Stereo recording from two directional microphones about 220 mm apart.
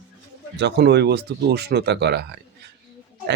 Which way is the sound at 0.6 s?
50° right (ahead or behind).